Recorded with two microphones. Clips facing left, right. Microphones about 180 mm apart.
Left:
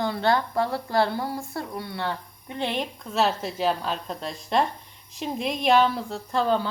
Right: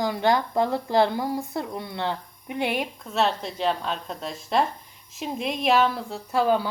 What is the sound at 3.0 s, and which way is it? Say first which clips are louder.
A woman's voice: left 1 dB; centre (ahead or behind).